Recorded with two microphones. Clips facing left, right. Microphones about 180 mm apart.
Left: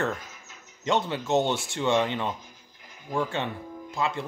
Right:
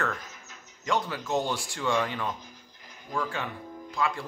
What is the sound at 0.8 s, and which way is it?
Speech, 25° left (ahead or behind).